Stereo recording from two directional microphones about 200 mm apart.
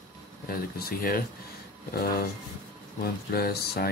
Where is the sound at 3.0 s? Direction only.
50° left (ahead or behind).